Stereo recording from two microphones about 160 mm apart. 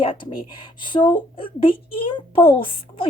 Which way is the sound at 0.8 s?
30° left (ahead or behind).